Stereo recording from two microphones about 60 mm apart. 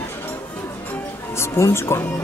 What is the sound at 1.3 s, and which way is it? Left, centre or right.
Speech, left.